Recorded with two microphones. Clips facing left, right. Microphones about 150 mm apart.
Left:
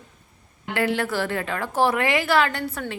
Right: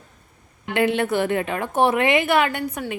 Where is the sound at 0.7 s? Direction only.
20° right (ahead or behind).